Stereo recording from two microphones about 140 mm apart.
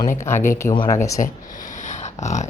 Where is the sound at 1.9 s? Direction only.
55° left (ahead or behind).